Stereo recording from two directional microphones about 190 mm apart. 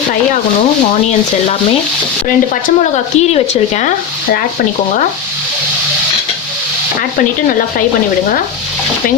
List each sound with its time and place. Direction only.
2.6 s speech: 35° left (ahead or behind)